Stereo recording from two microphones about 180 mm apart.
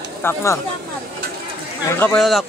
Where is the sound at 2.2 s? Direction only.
Centre (ahead or behind).